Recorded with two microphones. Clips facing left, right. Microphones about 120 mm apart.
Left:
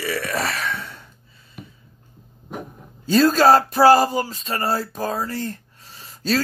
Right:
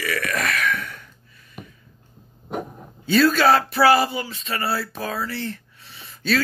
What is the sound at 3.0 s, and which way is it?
Speech, 35° left (ahead or behind).